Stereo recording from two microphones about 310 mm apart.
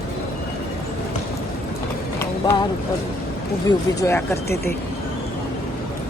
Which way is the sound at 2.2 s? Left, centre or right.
Centre.